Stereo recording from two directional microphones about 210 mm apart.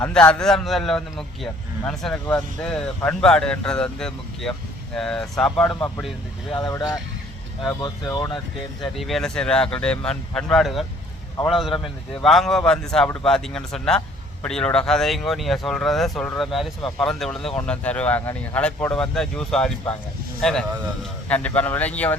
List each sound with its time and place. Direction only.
0.0 s speech: 5° left (ahead or behind)
6.5 s speech: 20° left (ahead or behind)
8.1 s speech: 15° left (ahead or behind)
8.8 s speech: centre (ahead or behind)